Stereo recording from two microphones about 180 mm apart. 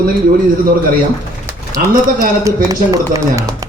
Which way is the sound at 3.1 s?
15° right (ahead or behind).